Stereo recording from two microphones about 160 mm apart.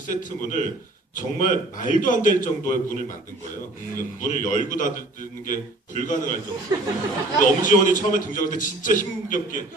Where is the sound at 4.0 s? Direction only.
55° left (ahead or behind).